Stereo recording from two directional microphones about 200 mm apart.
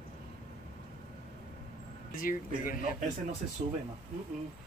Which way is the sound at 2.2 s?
45° left (ahead or behind).